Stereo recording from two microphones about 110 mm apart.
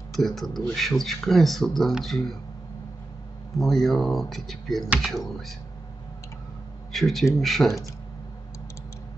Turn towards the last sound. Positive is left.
turn(degrees=0)  # may be behind; listen again after turning